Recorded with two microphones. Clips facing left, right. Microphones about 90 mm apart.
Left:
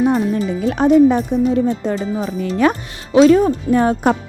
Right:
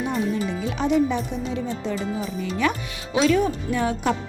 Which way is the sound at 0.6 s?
50° left (ahead or behind).